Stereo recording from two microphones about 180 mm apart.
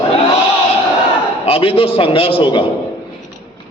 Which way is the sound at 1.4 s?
30° left (ahead or behind).